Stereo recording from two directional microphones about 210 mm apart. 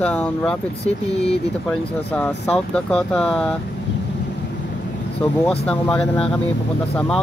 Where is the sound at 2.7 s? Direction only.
5° left (ahead or behind).